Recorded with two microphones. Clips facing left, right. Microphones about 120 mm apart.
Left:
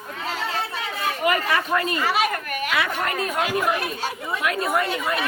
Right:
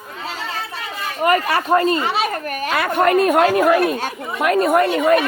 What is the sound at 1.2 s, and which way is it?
Speech, 40° right (ahead or behind).